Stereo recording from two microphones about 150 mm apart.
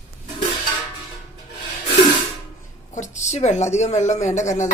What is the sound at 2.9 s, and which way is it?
A woman's voice, 55° left (ahead or behind).